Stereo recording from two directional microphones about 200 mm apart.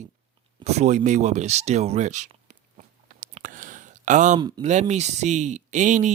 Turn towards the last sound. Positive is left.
turn(degrees=-40)  # may be behind; listen again after turning